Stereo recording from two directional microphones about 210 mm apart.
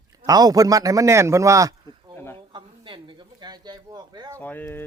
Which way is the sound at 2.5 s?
20° right (ahead or behind).